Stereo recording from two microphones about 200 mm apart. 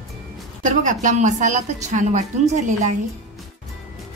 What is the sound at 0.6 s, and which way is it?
A woman's voice, 40° right (ahead or behind).